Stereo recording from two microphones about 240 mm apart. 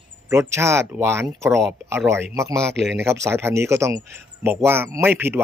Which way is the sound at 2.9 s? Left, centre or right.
Centre.